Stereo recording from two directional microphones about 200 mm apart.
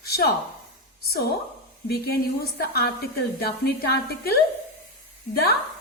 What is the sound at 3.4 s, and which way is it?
Speech, 50° left (ahead or behind).